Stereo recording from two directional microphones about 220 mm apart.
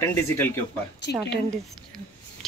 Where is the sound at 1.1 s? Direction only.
50° left (ahead or behind).